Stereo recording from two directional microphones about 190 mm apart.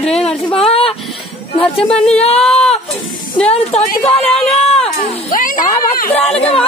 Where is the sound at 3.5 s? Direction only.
35° left (ahead or behind).